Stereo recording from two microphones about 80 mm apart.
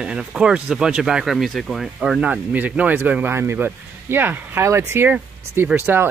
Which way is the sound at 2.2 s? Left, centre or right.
Centre.